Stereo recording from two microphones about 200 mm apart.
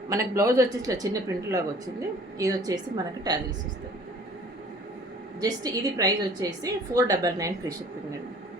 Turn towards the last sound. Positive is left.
turn(degrees=-15)  # may be behind; listen again after turning